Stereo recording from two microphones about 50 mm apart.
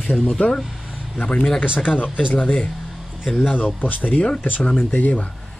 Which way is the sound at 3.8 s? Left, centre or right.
Left.